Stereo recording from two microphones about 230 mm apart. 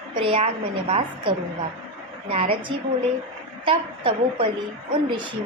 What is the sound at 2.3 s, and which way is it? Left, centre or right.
A woman's voice, right.